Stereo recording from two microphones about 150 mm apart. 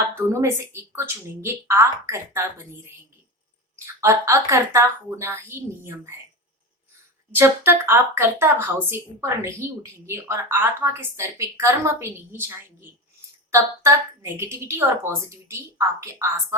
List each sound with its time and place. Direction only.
0.2 s speech: 15° right (ahead or behind)
4.0 s speech: 20° right (ahead or behind)
7.3 s speech: 15° right (ahead or behind)